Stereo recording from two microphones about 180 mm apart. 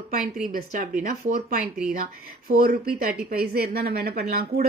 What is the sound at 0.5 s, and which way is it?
Speech, 50° right (ahead or behind).